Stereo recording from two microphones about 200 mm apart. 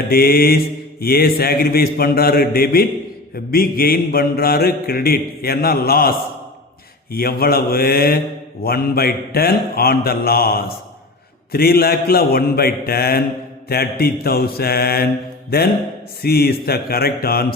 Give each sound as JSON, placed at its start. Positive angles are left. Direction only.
{"t": 0.1, "sound": "mantra", "side_deg": 50}